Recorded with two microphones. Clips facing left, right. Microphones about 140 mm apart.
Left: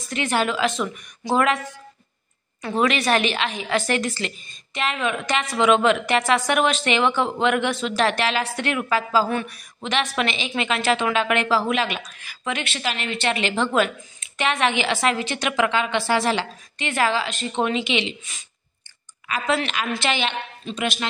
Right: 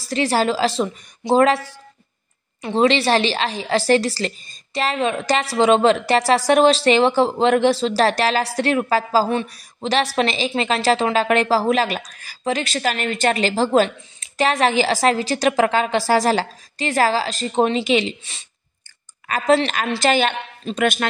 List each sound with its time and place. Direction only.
0.0 s a woman's voice: 35° right (ahead or behind); by 21.1 s 50° right (ahead or behind)